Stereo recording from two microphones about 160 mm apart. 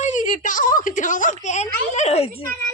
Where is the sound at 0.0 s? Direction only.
50° left (ahead or behind).